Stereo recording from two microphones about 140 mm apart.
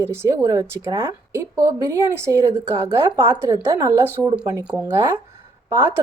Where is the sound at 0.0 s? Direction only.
20° right (ahead or behind).